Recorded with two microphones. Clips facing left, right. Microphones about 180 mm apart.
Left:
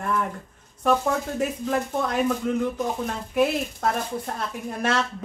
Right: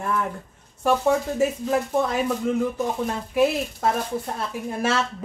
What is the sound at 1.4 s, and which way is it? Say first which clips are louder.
Speech: right 3 dB; centre (ahead or behind).